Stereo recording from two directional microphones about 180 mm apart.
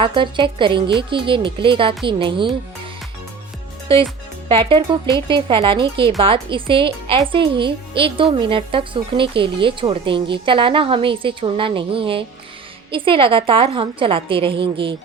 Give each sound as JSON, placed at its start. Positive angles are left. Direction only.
{"t": 0.0, "sound": "speech", "side_deg": -30}
{"t": 4.4, "sound": "speech", "side_deg": -30}